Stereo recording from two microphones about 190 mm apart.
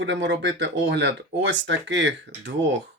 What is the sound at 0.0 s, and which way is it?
Speech, 75° right (ahead or behind).